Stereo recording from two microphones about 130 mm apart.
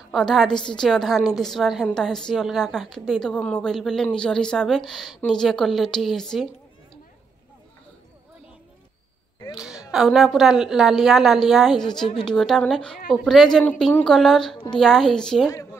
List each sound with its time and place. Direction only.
0.1 s a woman's voice: 5° left (ahead or behind)
9.8 s a woman's voice: centre (ahead or behind)